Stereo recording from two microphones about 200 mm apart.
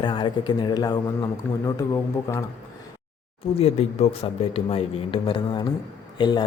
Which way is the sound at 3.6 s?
35° left (ahead or behind).